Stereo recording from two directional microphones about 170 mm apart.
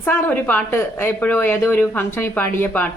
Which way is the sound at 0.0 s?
10° left (ahead or behind).